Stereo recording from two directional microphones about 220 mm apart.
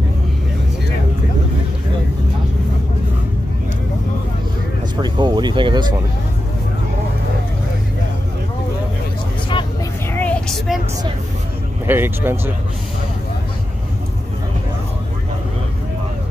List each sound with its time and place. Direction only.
5.0 s speech: 20° right (ahead or behind)
10.1 s vehicle: 5° left (ahead or behind)
11.8 s speech: 10° right (ahead or behind)